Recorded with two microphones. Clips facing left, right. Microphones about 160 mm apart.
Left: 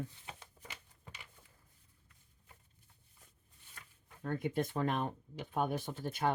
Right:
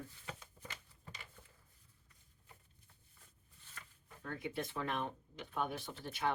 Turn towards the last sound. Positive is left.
turn(degrees=45)  # may be behind; listen again after turning